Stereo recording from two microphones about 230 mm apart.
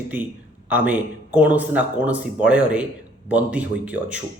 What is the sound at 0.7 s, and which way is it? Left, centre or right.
Speech, centre.